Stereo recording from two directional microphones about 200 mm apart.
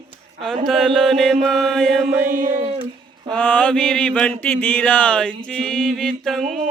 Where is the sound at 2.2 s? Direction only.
40° right (ahead or behind).